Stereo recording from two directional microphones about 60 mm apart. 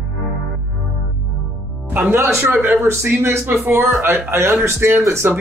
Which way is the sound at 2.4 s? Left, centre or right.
Right.